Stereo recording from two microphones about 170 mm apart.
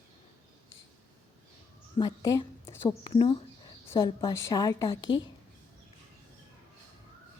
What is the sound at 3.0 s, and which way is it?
A woman's voice, 30° left (ahead or behind).